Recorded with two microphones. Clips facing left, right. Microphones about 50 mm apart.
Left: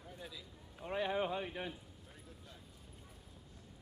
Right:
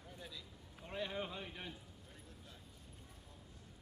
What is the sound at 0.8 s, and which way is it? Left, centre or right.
Speech, centre.